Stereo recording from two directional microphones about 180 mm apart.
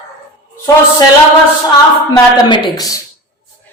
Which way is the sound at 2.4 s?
25° left (ahead or behind).